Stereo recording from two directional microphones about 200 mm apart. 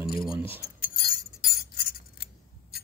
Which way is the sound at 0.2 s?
5° right (ahead or behind).